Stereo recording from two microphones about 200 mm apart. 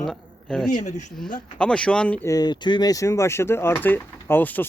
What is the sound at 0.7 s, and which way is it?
Speech, 40° left (ahead or behind).